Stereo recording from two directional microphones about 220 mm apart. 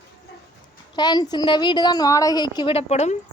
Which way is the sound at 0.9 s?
20° left (ahead or behind).